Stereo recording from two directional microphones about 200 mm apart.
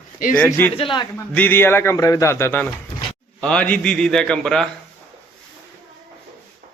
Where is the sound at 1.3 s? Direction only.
10° left (ahead or behind).